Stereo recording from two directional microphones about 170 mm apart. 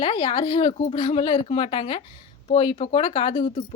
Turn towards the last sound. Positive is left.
turn(degrees=40)  # may be behind; listen again after turning